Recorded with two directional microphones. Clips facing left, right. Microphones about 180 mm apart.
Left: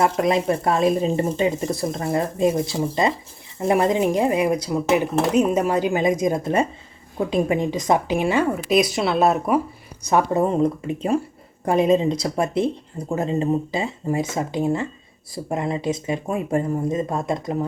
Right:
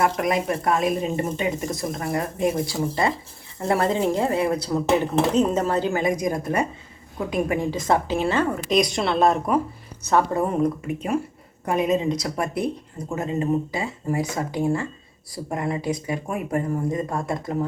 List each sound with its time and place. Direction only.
0.0 s a woman's voice: 25° left (ahead or behind)